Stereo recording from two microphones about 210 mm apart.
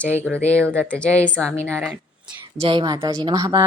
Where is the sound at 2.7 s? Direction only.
20° right (ahead or behind).